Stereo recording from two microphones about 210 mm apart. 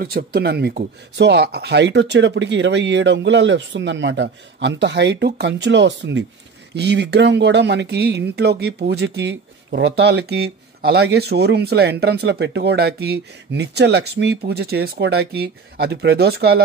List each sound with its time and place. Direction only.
0.0 s speech: 45° right (ahead or behind)